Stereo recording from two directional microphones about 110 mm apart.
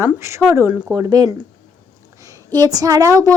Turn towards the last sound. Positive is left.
turn(degrees=-30)  # may be behind; listen again after turning